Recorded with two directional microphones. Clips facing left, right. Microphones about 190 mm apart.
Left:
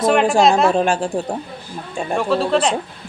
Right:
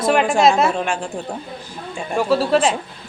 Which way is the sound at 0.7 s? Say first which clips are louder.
Left 5 dB; 35° left (ahead or behind).